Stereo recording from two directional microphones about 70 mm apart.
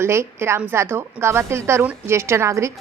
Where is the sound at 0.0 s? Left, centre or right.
Right.